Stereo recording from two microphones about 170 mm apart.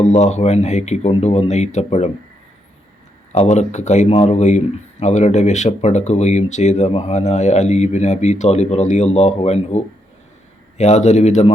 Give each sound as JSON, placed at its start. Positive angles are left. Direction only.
{"t": 0.0, "sound": "speech", "side_deg": 40}
{"t": 3.3, "sound": "speech", "side_deg": 40}